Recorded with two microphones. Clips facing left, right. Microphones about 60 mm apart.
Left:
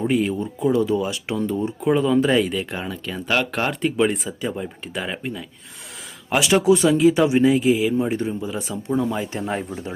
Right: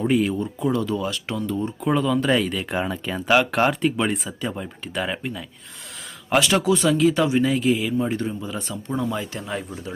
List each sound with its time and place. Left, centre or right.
0.0 s speech: centre
2.7 s speech: centre
7.5 s speech: centre
9.2 s speech: left